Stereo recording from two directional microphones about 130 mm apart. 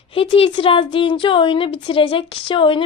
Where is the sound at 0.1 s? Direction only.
45° left (ahead or behind).